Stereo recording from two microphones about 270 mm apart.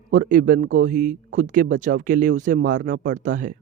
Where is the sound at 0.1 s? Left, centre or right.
Right.